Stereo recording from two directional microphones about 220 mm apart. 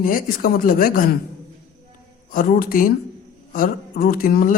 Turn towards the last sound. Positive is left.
turn(degrees=40)  # may be behind; listen again after turning